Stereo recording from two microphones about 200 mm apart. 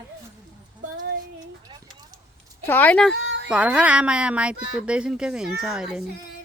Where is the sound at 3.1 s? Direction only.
65° right (ahead or behind).